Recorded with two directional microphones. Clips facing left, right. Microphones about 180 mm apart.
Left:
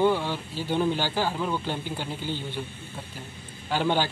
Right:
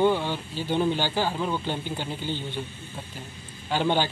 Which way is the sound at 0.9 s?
10° left (ahead or behind).